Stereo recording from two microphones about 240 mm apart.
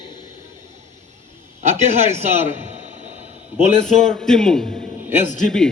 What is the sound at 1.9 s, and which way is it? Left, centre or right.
Speech, right.